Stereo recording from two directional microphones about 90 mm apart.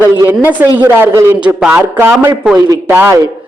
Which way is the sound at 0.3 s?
20° right (ahead or behind).